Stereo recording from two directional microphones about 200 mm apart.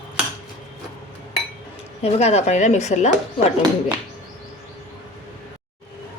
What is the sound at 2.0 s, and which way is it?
Speech, 30° left (ahead or behind).